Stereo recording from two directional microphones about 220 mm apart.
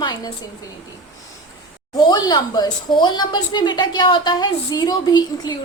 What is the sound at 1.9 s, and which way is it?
A woman's voice, 20° left (ahead or behind).